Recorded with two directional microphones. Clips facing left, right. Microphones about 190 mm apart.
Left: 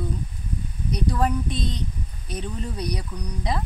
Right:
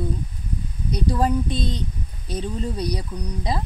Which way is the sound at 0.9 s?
25° right (ahead or behind).